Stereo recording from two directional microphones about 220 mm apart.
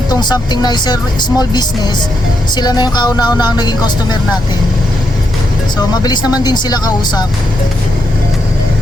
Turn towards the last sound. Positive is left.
turn(degrees=20)  # may be behind; listen again after turning